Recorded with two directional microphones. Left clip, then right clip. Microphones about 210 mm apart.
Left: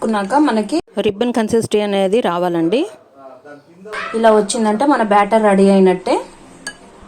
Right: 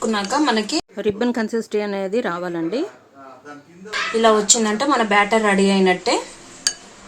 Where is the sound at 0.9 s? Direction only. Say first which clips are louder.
Left 5 dB; 30° left (ahead or behind).